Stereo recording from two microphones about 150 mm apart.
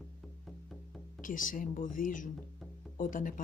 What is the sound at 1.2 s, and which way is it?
Speech, 60° left (ahead or behind).